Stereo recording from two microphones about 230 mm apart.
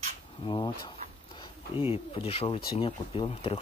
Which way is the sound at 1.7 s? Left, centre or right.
Left.